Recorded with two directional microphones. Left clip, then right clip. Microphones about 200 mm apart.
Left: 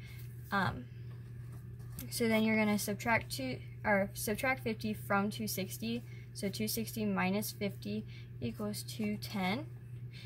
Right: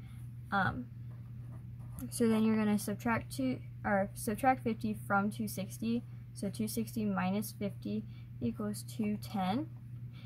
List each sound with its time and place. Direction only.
0.5 s speech: 15° right (ahead or behind)
2.1 s a woman's voice: 20° right (ahead or behind)